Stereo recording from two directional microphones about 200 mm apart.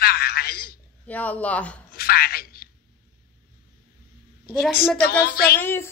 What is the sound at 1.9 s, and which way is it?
Speech, 50° left (ahead or behind).